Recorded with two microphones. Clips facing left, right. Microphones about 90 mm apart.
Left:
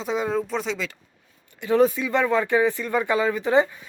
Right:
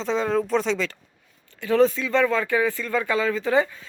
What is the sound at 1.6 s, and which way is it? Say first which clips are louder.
Speech: even; 15° left (ahead or behind).